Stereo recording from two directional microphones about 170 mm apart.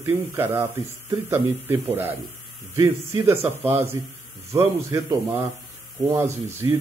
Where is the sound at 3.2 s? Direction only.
15° right (ahead or behind).